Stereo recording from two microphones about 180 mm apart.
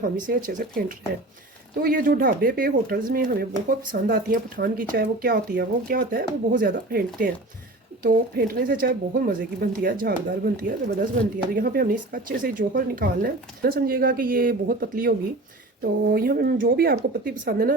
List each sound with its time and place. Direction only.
0.0 s speech: 50° right (ahead or behind)
1.8 s speech: 50° right (ahead or behind)